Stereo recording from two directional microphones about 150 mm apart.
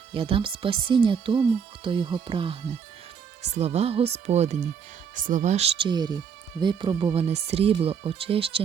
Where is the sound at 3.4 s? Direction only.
45° right (ahead or behind).